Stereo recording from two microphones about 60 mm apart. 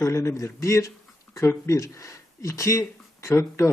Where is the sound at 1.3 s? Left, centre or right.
Left.